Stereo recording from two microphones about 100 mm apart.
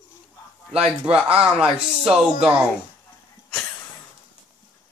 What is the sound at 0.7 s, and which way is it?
Speech, 80° right.